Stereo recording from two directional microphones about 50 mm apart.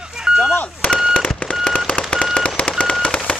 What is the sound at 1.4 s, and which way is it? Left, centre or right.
Fireworks, centre.